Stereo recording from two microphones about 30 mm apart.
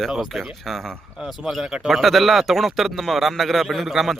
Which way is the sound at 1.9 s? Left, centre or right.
Centre.